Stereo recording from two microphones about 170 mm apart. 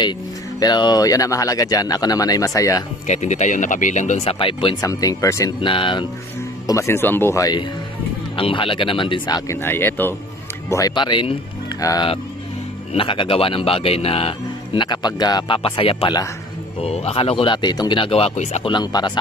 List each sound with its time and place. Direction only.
0.6 s speech: 25° left (ahead or behind)
3.1 s speech: 45° left (ahead or behind)
4.8 s speech: 20° left (ahead or behind)
5.7 s speech: 30° left (ahead or behind)
6.7 s speech: 15° left (ahead or behind)
8.4 s speech: 30° left (ahead or behind)
9.5 s speech: 15° left (ahead or behind)
10.7 s speech: 25° left (ahead or behind); by 18.7 s 40° left (ahead or behind)
18.7 s speech: 25° left (ahead or behind)